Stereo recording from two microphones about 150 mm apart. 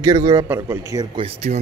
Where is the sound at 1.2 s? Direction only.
40° right (ahead or behind).